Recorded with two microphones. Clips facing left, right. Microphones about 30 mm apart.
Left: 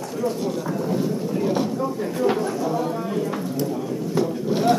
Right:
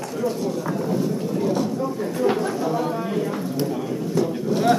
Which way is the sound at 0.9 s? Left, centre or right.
Centre.